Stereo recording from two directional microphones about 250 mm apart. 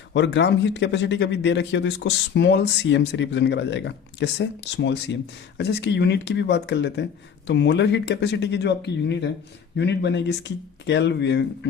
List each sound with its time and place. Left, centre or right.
0.1 s speech: left